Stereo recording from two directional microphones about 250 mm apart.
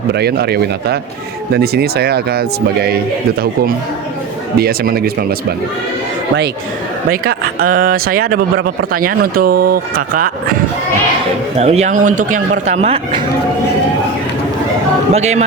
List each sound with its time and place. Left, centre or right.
0.1 s speech: right
4.5 s speech: right
7.1 s speech: right
11.5 s speech: right
15.1 s speech: right